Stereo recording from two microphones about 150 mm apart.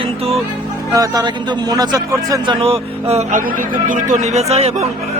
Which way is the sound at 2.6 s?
40° right (ahead or behind).